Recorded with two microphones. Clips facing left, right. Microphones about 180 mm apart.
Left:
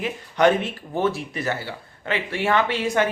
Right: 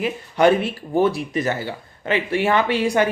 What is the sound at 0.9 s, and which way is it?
Speech, 15° right (ahead or behind).